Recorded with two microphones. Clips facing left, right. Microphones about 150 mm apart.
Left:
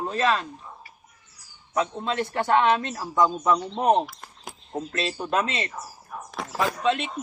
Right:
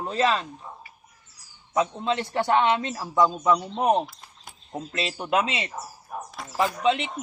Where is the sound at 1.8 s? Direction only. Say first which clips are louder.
Right 1 dB; 20° right (ahead or behind).